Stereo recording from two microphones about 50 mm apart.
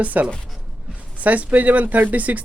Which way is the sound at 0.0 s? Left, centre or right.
Right.